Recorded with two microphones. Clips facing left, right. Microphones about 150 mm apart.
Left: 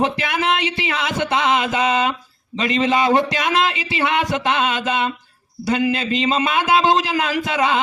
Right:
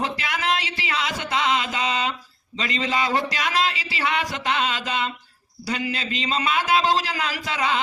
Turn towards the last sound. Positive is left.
turn(degrees=20)  # may be behind; listen again after turning